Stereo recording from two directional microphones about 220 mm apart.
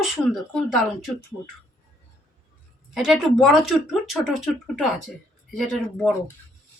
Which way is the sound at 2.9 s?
Centre (ahead or behind).